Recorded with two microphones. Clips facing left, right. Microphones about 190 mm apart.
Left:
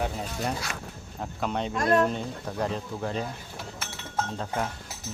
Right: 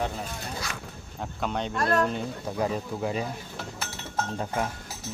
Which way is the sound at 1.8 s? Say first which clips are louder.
Left 2 dB; 15° left (ahead or behind).